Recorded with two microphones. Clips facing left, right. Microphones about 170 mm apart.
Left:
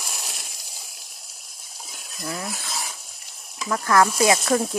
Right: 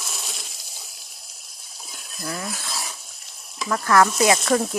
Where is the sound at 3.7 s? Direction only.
15° left (ahead or behind).